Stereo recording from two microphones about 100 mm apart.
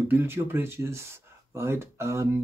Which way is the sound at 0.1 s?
20° right (ahead or behind).